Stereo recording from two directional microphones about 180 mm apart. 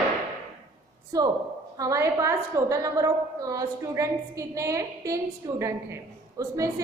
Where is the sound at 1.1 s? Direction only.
20° right (ahead or behind).